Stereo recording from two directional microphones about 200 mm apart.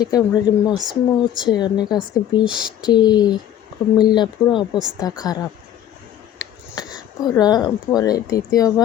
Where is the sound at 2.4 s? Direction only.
5° right (ahead or behind).